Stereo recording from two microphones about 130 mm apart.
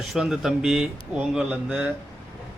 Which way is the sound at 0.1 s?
5° right (ahead or behind).